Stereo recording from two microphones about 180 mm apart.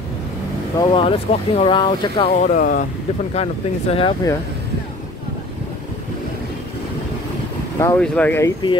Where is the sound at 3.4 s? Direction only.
35° left (ahead or behind).